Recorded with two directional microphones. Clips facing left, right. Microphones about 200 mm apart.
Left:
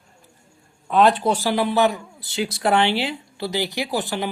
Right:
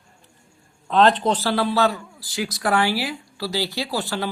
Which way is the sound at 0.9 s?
10° left (ahead or behind).